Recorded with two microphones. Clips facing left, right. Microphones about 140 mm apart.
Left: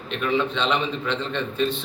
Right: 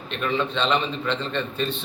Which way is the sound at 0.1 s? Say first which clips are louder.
Left 2 dB; 10° left (ahead or behind).